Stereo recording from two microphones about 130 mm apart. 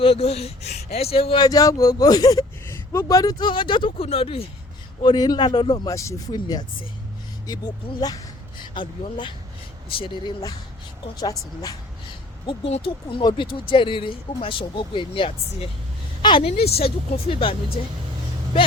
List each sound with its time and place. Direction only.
0.0 s speech: 50° left (ahead or behind)
1.4 s speech: 30° left (ahead or behind); by 4.4 s 45° left (ahead or behind)
5.0 s speech: 30° left (ahead or behind)
8.7 s a woman's voice: 35° left (ahead or behind)
12.5 s a woman's voice: 45° left (ahead or behind)
16.5 s speech: 50° left (ahead or behind)